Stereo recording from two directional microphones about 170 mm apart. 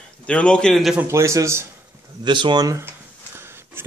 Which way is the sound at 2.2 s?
25° right (ahead or behind).